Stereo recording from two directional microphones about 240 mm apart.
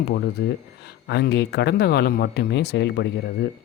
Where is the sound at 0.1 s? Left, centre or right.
Left.